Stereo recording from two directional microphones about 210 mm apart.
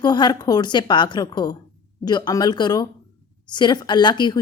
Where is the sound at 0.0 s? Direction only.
20° left (ahead or behind).